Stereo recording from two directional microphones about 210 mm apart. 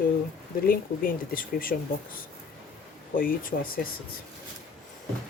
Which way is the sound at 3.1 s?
40° left (ahead or behind).